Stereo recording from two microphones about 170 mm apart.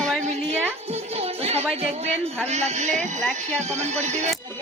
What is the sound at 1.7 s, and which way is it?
Music, 40° right (ahead or behind).